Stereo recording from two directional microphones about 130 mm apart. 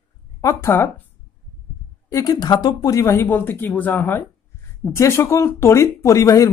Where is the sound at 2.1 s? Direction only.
25° left (ahead or behind).